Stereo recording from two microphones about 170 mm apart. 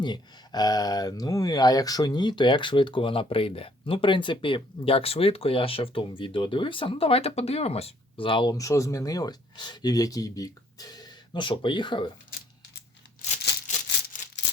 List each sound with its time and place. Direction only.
0.0 s speech: 25° left (ahead or behind)